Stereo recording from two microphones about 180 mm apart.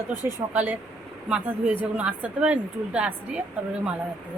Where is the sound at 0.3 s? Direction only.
10° right (ahead or behind).